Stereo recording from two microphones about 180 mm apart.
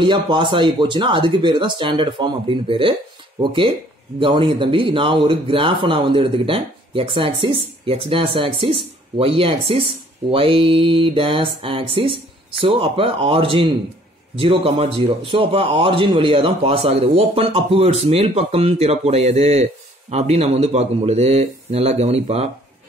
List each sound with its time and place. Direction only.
0.0 s a man's voice: 25° right (ahead or behind)